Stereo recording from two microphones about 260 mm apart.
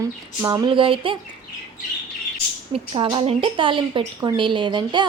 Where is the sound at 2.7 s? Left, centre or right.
Centre.